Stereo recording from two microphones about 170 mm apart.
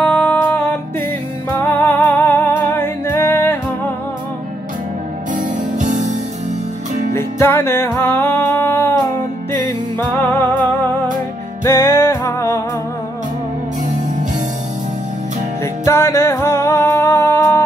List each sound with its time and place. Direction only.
0.0 s music: 10° left (ahead or behind)
5.3 s music: 50° right (ahead or behind)
7.2 s music: 15° left (ahead or behind)
11.6 s music: 20° left (ahead or behind)
15.6 s music: 15° left (ahead or behind)